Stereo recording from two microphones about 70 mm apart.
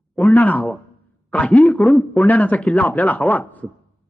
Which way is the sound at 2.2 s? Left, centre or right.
Left.